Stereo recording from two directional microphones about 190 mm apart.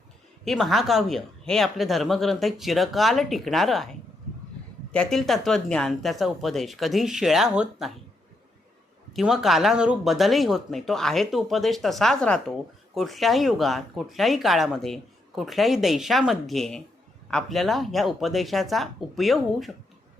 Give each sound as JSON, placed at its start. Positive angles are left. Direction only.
{"t": 0.4, "sound": "speech", "side_deg": 0}
{"t": 4.9, "sound": "speech", "side_deg": 5}
{"t": 9.1, "sound": "speech", "side_deg": 0}